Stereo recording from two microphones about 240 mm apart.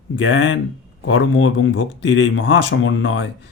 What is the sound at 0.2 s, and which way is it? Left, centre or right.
Speech, left.